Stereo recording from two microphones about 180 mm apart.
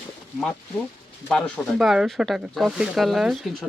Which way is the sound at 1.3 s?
5° left (ahead or behind).